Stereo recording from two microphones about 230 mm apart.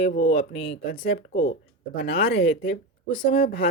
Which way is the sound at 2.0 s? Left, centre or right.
Left.